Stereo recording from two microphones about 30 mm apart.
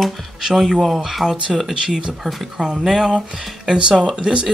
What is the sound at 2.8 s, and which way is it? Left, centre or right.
Speech, centre.